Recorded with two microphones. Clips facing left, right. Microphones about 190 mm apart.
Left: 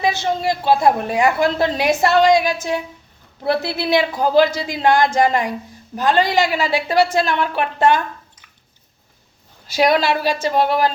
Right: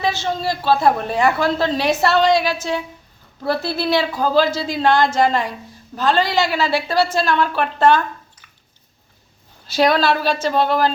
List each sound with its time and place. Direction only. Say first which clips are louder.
0.0 s a woman's voice: left 2 dB; 15° left (ahead or behind)
9.6 s a woman's voice: even; 15° left (ahead or behind)